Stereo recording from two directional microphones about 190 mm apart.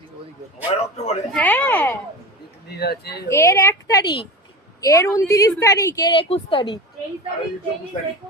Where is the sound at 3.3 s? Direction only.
15° left (ahead or behind).